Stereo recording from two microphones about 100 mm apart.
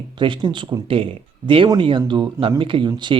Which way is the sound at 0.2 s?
55° right (ahead or behind).